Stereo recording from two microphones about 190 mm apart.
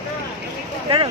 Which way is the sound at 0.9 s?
30° right (ahead or behind).